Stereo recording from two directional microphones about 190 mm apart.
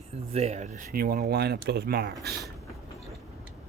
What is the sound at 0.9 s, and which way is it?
Speech, 50° right (ahead or behind).